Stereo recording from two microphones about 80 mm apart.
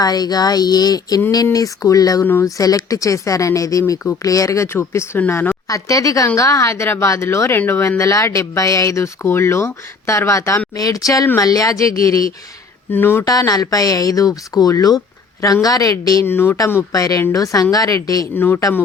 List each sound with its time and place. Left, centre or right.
0.0 s speech: left
1.5 s speech: left
5.6 s speech: left
10.8 s speech: left
12.9 s speech: left
13.2 s speech: left
16.2 s speech: left
16.9 s speech: left
18.3 s speech: left